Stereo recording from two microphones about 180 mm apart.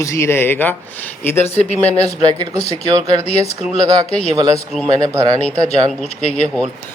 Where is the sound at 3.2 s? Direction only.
35° left (ahead or behind).